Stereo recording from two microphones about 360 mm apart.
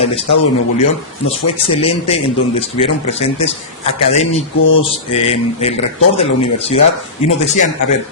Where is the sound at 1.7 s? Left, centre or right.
Centre.